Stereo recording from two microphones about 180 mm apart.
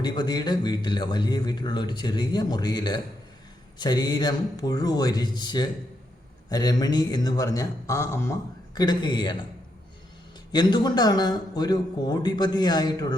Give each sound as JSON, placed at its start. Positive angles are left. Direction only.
{"t": 0.0, "sound": "speech", "side_deg": 25}
{"t": 10.5, "sound": "speech", "side_deg": 25}